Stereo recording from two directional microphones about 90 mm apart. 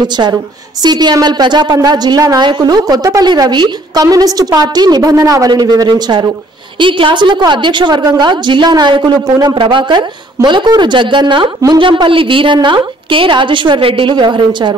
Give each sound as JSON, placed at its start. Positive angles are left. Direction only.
{"t": 0.0, "sound": "a woman's voice", "side_deg": -55}
{"t": 5.5, "sound": "a woman's voice", "side_deg": -55}
{"t": 6.8, "sound": "a woman's voice", "side_deg": -70}
{"t": 9.6, "sound": "a woman's voice", "side_deg": -65}